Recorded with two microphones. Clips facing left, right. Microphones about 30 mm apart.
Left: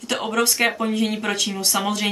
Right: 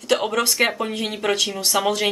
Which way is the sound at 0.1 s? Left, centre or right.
Right.